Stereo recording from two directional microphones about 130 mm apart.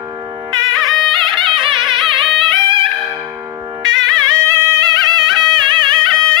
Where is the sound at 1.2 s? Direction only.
40° right (ahead or behind).